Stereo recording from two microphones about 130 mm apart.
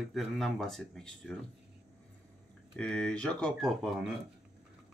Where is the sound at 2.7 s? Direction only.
5° left (ahead or behind).